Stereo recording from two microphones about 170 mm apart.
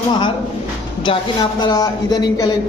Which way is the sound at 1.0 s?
25° left (ahead or behind).